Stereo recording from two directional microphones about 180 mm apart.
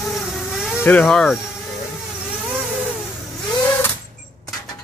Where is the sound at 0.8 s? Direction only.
10° left (ahead or behind).